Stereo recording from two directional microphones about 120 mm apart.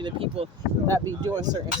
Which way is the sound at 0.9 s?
30° right (ahead or behind).